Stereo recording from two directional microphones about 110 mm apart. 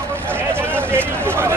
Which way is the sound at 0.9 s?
20° right (ahead or behind).